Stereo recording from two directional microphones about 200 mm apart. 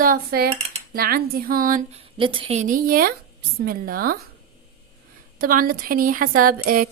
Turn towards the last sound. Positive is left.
turn(degrees=-45)  # may be behind; listen again after turning